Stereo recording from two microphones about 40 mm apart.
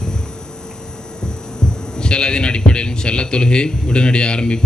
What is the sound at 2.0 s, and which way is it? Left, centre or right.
A man's voice, left.